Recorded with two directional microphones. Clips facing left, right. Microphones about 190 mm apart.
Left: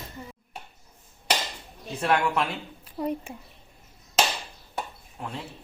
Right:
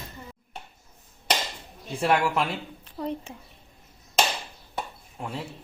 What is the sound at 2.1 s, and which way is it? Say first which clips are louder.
Speech: even; 5° right (ahead or behind).